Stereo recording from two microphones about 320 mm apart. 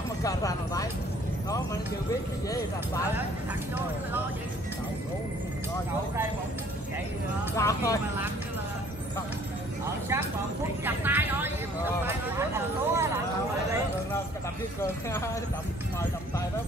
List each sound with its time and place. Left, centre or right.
0.2 s speech: centre
2.5 s speech: centre
7.5 s speech: centre
10.0 s a sound: centre
14.8 s speech: centre